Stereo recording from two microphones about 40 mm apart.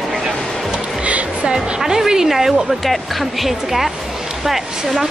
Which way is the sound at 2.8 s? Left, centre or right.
Centre.